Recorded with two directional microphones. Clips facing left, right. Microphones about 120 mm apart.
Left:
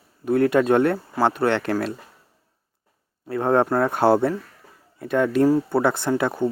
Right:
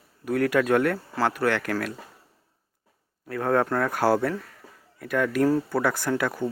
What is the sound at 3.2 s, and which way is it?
Speech, 25° left (ahead or behind).